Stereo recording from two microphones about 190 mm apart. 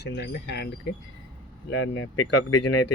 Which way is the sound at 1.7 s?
85° left.